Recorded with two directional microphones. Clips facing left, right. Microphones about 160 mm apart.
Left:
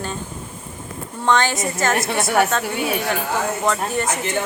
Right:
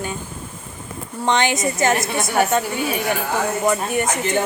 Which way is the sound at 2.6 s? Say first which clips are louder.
Even; 70° left (ahead or behind).